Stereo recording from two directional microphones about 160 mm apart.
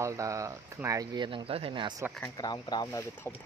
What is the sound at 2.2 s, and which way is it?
Speech, 25° left (ahead or behind).